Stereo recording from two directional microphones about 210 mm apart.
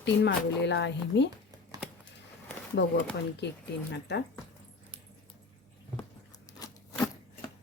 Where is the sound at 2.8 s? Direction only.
50° left (ahead or behind).